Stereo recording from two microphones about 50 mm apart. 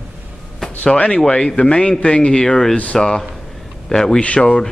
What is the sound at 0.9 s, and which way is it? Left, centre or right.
Speech, left.